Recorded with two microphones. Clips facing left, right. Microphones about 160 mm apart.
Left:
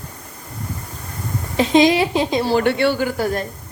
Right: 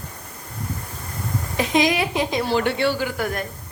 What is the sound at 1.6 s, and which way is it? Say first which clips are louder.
Speech: left 6 dB; 30° left (ahead or behind).